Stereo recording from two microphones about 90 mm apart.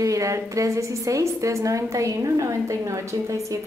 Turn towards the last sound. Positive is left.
turn(degrees=-35)  # may be behind; listen again after turning